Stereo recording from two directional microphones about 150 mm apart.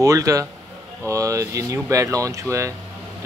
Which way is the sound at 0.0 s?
20° right (ahead or behind).